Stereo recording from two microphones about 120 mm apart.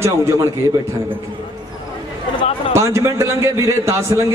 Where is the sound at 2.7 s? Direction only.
25° right (ahead or behind).